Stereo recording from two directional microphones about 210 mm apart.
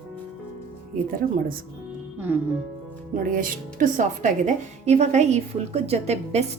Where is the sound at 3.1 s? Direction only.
40° right (ahead or behind).